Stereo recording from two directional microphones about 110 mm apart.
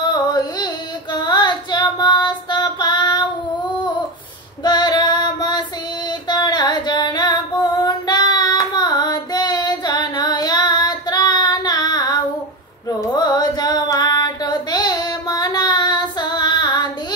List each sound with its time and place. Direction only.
0.1 s carnatic music: 40° left (ahead or behind)
1.2 s child singing: 45° left (ahead or behind)
4.6 s child singing: 40° left (ahead or behind)
13.1 s carnatic music: 35° left (ahead or behind)